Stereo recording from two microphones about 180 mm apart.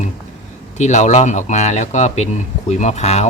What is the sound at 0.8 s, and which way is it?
Speech, 40° left (ahead or behind).